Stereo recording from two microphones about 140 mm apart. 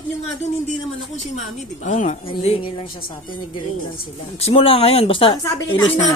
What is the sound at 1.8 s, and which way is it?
Speech, 60° left (ahead or behind).